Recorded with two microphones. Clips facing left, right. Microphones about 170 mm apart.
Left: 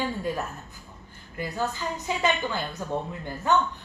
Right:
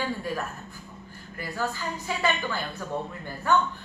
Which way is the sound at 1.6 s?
20° left (ahead or behind).